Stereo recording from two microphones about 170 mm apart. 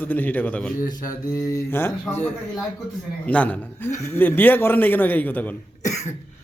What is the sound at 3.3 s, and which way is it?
A man's voice, 10° left (ahead or behind).